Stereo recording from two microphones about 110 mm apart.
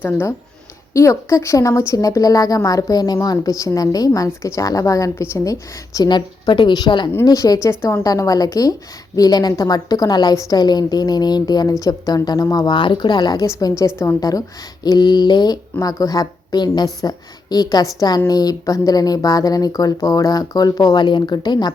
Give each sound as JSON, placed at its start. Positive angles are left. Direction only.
{"t": 0.0, "sound": "a woman's voice", "side_deg": 20}